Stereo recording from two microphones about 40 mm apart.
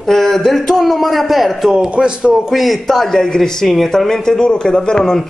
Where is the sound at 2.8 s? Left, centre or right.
Centre.